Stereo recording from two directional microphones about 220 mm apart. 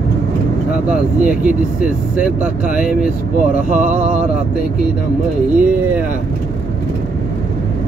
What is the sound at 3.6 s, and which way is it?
Mantra, 35° right (ahead or behind).